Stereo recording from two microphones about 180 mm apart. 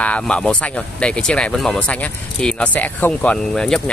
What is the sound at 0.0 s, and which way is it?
Speech, 5° left (ahead or behind).